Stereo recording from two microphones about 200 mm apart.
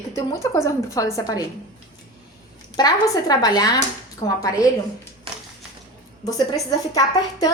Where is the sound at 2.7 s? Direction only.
20° left (ahead or behind).